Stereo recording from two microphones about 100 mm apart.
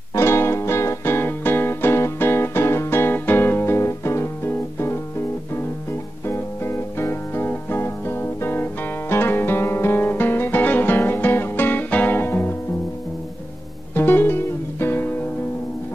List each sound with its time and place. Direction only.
0.1 s music: 25° left (ahead or behind)
6.2 s music: 25° left (ahead or behind)
9.1 s guitar: 25° left (ahead or behind)
13.9 s music: 20° left (ahead or behind)